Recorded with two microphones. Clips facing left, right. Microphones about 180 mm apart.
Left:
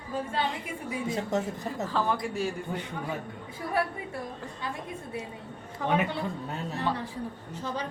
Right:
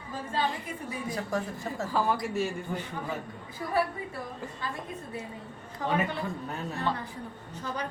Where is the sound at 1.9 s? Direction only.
5° right (ahead or behind).